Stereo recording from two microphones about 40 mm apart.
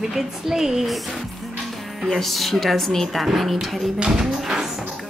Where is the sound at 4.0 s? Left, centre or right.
Centre.